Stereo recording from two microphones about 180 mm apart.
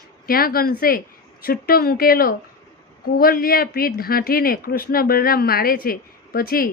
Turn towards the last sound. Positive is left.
turn(degrees=55)  # may be behind; listen again after turning